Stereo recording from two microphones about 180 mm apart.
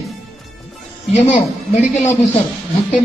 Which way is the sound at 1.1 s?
40° left (ahead or behind).